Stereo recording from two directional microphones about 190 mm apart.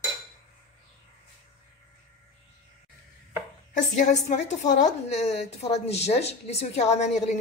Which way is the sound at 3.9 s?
40° left (ahead or behind).